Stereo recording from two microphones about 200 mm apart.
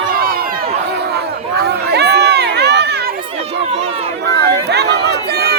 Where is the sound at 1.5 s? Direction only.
55° right (ahead or behind).